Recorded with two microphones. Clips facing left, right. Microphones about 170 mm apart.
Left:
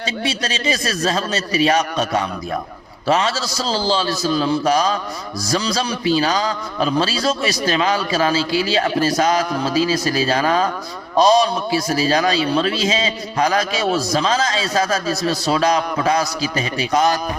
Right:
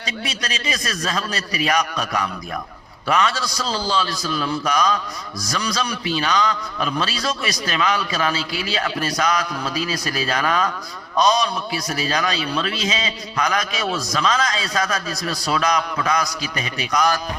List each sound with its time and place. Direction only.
0.3 s a man's voice: 30° left (ahead or behind)